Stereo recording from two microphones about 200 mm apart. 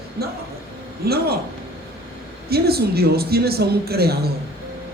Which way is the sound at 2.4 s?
50° right (ahead or behind).